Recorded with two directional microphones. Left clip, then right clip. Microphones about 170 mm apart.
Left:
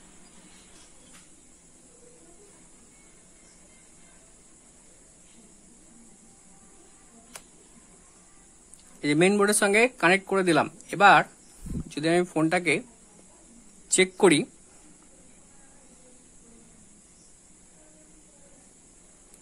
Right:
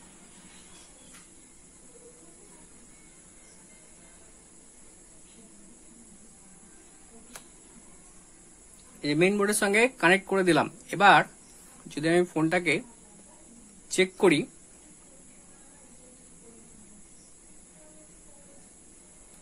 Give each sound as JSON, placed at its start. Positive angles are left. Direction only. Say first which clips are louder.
{"t": 9.0, "sound": "speech", "louder": "left 3 dB", "side_deg": 40}
{"t": 13.8, "sound": "speech", "louder": "left 2 dB", "side_deg": 35}